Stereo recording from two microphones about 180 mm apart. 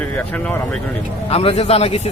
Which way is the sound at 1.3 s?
35° left (ahead or behind).